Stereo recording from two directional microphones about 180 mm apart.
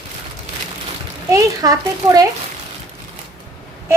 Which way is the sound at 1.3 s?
20° right (ahead or behind).